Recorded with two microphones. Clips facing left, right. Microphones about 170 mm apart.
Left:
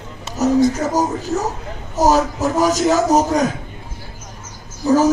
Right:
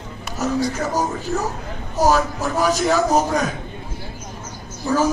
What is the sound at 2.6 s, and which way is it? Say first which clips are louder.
Speech: left 3 dB; 40° left (ahead or behind).